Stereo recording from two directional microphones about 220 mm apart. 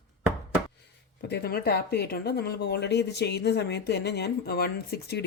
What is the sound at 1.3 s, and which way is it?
Speech, 45° left (ahead or behind).